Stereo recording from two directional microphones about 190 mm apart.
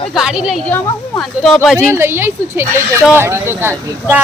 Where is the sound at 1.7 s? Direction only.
15° right (ahead or behind).